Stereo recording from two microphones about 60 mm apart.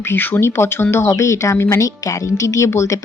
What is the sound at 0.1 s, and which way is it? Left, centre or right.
Speech, left.